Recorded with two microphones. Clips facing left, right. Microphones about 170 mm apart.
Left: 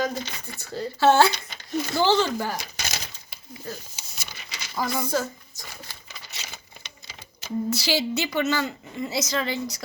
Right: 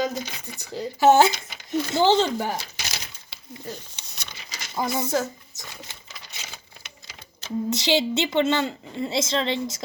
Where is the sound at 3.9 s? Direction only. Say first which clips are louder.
Even; 5° left (ahead or behind).